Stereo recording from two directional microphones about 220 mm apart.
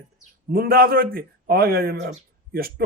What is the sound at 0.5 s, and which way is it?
A man's voice, 45° right (ahead or behind).